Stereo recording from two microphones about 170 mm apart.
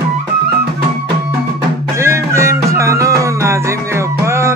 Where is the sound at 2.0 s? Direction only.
15° right (ahead or behind).